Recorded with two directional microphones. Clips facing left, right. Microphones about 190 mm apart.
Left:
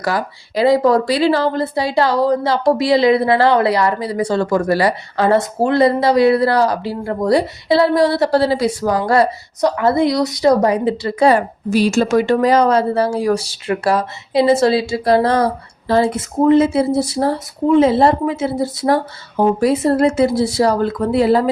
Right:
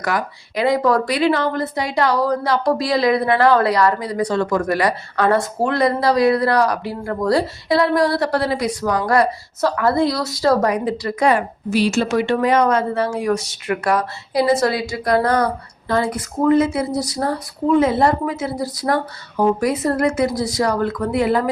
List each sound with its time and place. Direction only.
0.0 s a woman's voice: 35° left (ahead or behind)